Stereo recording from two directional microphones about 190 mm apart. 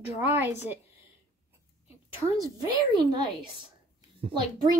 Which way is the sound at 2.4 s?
20° right (ahead or behind).